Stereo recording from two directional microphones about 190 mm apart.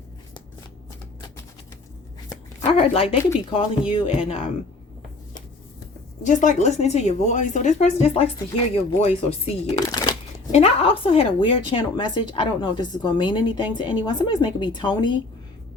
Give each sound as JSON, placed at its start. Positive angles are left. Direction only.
{"t": 2.6, "sound": "a woman's voice", "side_deg": 30}
{"t": 6.2, "sound": "a woman's voice", "side_deg": 40}
{"t": 10.5, "sound": "a woman's voice", "side_deg": 30}